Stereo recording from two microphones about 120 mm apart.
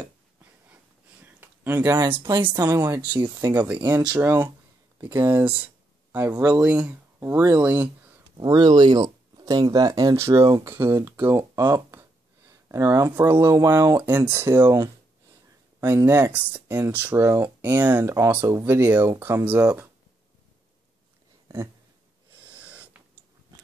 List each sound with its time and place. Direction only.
1.2 s a sound: 15° right (ahead or behind)
2.5 s speech: 25° right (ahead or behind)
3.5 s speech: 10° right (ahead or behind)
6.1 s speech: 20° right (ahead or behind)
6.4 s speech: 10° right (ahead or behind)
8.4 s speech: 35° right (ahead or behind); by 14.8 s 20° right (ahead or behind)
15.8 s speech: 20° right (ahead or behind)
22.6 s a sound: 10° right (ahead or behind)